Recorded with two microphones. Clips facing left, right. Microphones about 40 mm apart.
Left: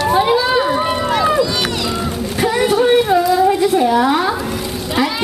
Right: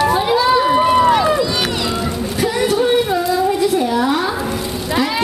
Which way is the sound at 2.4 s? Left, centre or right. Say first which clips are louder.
Left 2 dB; centre.